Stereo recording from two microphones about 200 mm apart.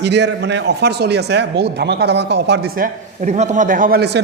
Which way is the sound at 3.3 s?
35° right (ahead or behind).